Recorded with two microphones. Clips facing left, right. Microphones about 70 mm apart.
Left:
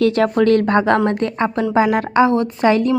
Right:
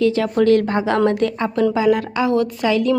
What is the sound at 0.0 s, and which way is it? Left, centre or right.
Speech, left.